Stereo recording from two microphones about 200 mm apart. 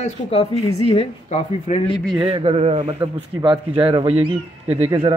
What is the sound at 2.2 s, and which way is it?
A man's voice, 25° right (ahead or behind).